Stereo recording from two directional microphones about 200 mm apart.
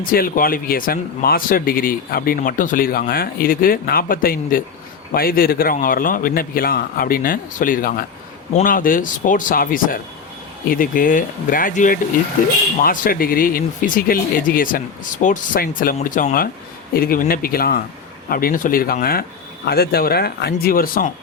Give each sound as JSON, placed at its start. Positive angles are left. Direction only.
{"t": 0.0, "sound": "speech", "side_deg": 45}